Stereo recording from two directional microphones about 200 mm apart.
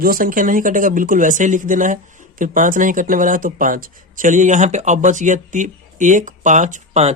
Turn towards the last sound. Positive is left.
turn(degrees=-35)  # may be behind; listen again after turning